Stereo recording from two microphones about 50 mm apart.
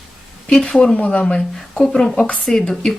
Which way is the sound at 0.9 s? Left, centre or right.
Left.